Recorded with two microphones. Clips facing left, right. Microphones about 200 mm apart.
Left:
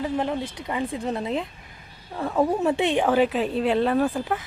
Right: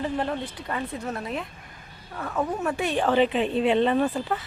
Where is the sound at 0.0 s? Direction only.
15° left (ahead or behind).